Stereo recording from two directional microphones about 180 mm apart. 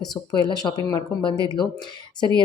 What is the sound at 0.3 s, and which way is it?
A woman's voice, 25° left (ahead or behind).